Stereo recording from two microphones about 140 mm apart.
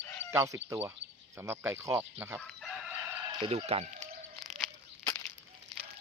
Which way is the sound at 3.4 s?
45° right (ahead or behind).